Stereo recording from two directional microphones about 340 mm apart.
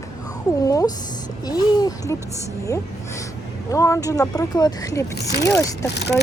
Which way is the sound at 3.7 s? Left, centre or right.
Centre.